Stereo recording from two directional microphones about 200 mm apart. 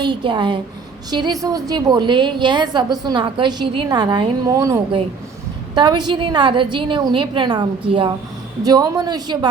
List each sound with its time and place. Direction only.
0.0 s a woman's voice: 25° right (ahead or behind)